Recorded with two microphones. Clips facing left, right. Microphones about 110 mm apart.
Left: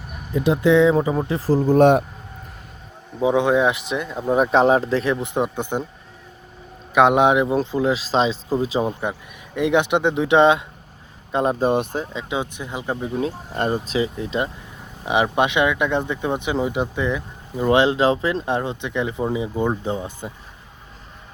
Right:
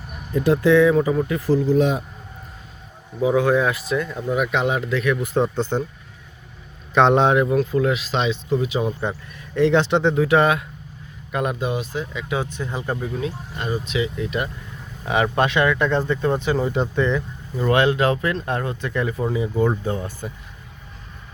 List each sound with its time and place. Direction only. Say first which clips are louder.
0.4 s speech: even; 20° left (ahead or behind); by 2.0 s 60° left (ahead or behind)
3.2 s speech: left 1 dB; 20° left (ahead or behind)
4.3 s speech: left 6 dB; 35° left (ahead or behind); by 5.8 s 15° left (ahead or behind)
6.9 s speech: left 1 dB; 10° left (ahead or behind)
7.5 s speech: even; 30° left (ahead or behind)
9.6 s speech: right 1 dB; 15° left (ahead or behind)
11.6 s speech: left 5 dB; 50° left (ahead or behind)
12.1 s speech: even; 20° left (ahead or behind)
13.1 s speech: left 4 dB; 40° left (ahead or behind); by 17.7 s 15° left (ahead or behind)
17.7 s speech: left 1 dB; 25° left (ahead or behind)